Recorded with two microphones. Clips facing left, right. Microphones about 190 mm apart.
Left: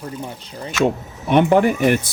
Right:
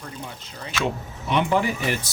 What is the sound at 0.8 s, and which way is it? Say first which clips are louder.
Speech: left 9 dB; 45° left (ahead or behind).